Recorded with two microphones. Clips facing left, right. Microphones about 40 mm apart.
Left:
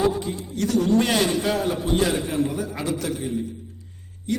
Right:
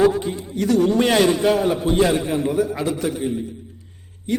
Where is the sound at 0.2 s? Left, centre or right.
Right.